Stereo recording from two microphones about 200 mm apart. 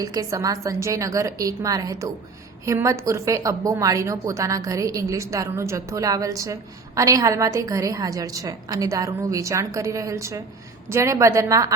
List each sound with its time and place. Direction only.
0.0 s a woman's voice: 15° right (ahead or behind)